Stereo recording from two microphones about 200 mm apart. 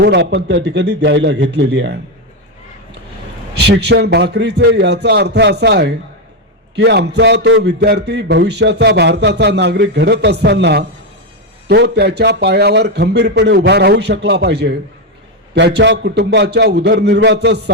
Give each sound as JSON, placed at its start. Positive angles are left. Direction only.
{"t": 0.0, "sound": "a man's voice", "side_deg": -55}
{"t": 3.5, "sound": "a man's voice", "side_deg": -55}